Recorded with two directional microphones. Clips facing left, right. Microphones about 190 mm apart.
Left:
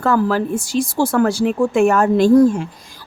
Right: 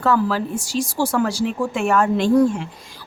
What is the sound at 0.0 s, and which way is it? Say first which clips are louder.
Speech: left 3 dB; 50° left (ahead or behind).